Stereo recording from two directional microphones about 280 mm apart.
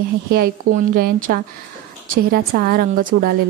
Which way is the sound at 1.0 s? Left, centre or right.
Right.